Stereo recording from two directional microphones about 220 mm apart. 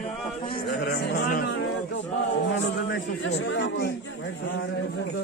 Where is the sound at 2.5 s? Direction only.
55° left (ahead or behind).